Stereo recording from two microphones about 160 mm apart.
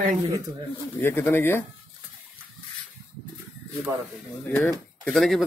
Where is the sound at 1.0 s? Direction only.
15° left (ahead or behind).